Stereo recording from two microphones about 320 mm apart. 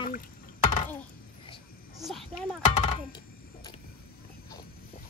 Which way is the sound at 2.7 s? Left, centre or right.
Centre.